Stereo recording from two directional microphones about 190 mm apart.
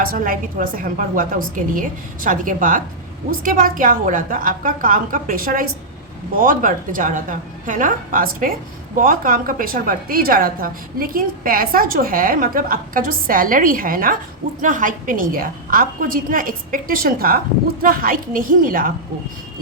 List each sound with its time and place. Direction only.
0.0 s a woman's voice: 50° right (ahead or behind)